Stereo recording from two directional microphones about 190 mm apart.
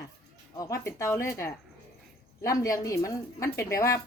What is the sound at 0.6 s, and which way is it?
A woman's voice, 15° left (ahead or behind).